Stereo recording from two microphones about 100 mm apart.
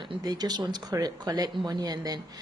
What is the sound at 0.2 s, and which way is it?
A woman's voice, 40° right (ahead or behind).